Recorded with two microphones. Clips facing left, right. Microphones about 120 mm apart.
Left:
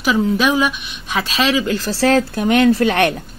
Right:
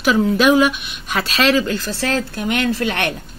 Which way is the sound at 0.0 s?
Centre (ahead or behind).